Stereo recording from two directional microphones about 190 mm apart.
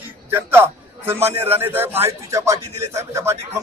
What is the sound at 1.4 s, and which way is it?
A man's voice, 10° right (ahead or behind).